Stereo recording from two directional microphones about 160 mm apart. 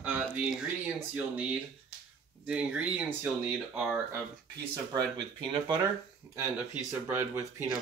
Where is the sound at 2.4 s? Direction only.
10° right (ahead or behind).